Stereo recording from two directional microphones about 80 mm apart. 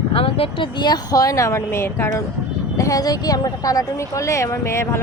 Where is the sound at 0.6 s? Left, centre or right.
Left.